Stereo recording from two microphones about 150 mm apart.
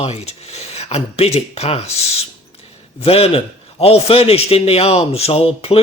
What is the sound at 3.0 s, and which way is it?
Speech, 40° left (ahead or behind).